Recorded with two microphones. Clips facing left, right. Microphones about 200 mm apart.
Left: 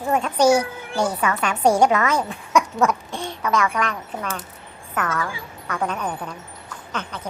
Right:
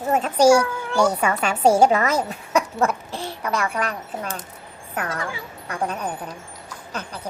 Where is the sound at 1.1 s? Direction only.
25° right (ahead or behind).